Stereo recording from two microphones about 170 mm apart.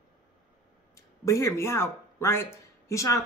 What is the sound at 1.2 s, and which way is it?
Speech, 20° left (ahead or behind).